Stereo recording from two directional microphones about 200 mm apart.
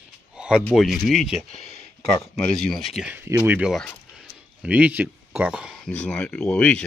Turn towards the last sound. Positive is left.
turn(degrees=5)  # may be behind; listen again after turning